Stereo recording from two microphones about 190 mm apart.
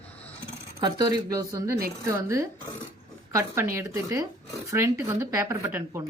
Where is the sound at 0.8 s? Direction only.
20° right (ahead or behind).